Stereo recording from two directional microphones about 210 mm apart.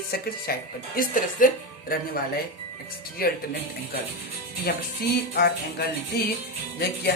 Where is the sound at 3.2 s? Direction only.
45° left (ahead or behind).